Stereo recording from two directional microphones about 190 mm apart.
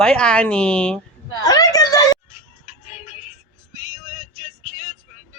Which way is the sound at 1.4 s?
20° left (ahead or behind).